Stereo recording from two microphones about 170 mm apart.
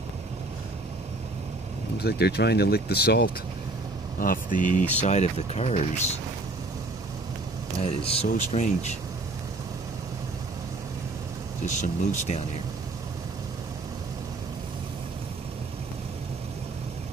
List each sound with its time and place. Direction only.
2.0 s speech: 70° left (ahead or behind)
4.2 s speech: 55° left (ahead or behind)
7.8 s speech: 35° left (ahead or behind)
11.6 s speech: 45° left (ahead or behind)